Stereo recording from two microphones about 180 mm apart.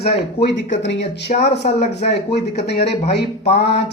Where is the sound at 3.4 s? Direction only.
35° left (ahead or behind).